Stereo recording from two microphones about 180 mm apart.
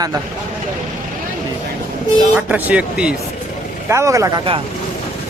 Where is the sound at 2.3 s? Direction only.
5° right (ahead or behind).